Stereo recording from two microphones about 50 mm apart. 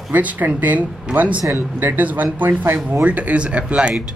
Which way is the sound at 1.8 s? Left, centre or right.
Right.